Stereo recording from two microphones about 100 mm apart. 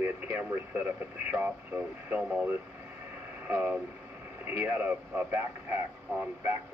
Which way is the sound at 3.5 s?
20° right (ahead or behind).